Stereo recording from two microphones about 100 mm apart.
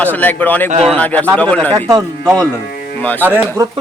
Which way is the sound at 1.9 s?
40° right (ahead or behind).